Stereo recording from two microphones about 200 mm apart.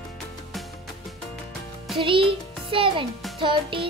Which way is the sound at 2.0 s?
25° right (ahead or behind).